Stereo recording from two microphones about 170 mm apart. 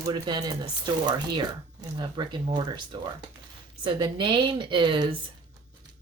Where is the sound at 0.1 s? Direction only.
25° right (ahead or behind).